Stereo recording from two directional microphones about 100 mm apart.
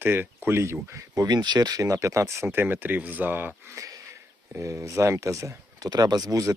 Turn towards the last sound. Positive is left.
turn(degrees=-35)  # may be behind; listen again after turning